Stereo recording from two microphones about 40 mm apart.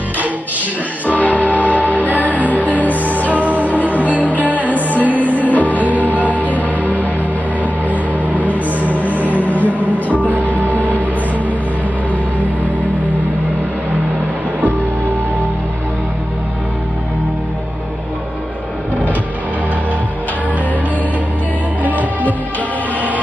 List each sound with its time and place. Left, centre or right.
1.1 s music: left
1.8 s music: right
2.4 s music: left
3.3 s music: right
5.4 s music: left
5.8 s music: right
6.3 s music: left
6.6 s music: right
8.9 s music: left
9.9 s music: right
10.7 s music: left